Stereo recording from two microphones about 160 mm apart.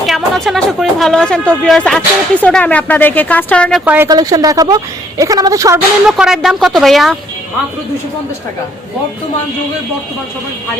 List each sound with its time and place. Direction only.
0.0 s speech: centre (ahead or behind)
3.8 s a woman's voice: 15° right (ahead or behind)
6.1 s speech: 5° right (ahead or behind)